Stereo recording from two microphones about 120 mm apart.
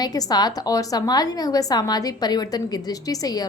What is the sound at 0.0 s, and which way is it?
A woman's voice, 30° left (ahead or behind).